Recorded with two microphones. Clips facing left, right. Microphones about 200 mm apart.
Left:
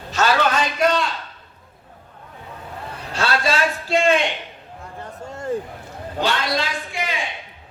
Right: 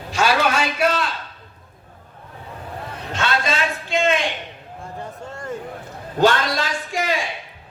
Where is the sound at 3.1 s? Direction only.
35° left (ahead or behind).